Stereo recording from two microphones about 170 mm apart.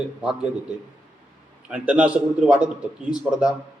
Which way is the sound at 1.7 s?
5° right (ahead or behind).